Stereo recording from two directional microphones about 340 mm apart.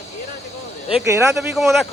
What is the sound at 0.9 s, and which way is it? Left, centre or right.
Speech, centre.